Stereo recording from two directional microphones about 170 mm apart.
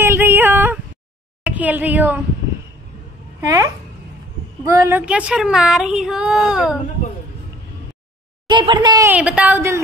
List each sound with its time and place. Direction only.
0.0 s female singing: 15° right (ahead or behind)
1.4 s speech: 10° right (ahead or behind)
3.3 s a woman's voice: 20° right (ahead or behind)
4.7 s speech: 10° right (ahead or behind)
8.5 s speech: 30° right (ahead or behind)
9.1 s a woman's voice: 10° right (ahead or behind)